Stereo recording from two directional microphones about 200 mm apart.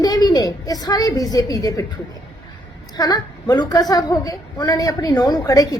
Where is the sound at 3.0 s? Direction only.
20° left (ahead or behind).